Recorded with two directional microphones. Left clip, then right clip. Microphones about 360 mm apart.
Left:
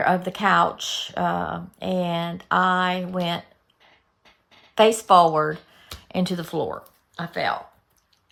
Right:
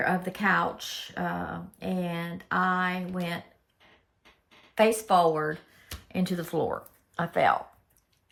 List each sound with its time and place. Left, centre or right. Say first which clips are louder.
0.0 s speech: left 6 dB; centre
4.8 s speech: left 7 dB; centre